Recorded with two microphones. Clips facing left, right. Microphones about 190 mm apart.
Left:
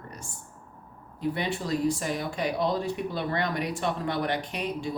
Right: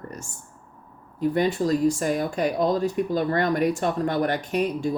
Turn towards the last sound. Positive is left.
turn(degrees=-45)  # may be behind; listen again after turning